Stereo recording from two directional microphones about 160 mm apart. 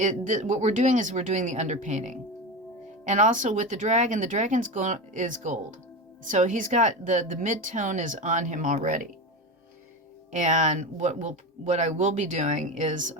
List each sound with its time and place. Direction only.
0.0 s speech: 50° right (ahead or behind)
10.3 s speech: 50° right (ahead or behind)